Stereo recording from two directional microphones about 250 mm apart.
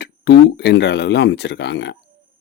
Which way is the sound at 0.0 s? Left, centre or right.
Left.